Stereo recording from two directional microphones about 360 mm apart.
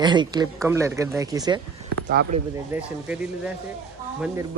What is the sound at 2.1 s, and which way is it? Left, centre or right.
Speech, right.